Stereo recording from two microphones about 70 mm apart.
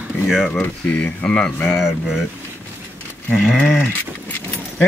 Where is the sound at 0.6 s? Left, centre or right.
Centre.